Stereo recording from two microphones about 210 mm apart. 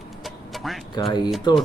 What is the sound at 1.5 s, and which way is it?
Speech, 20° left (ahead or behind).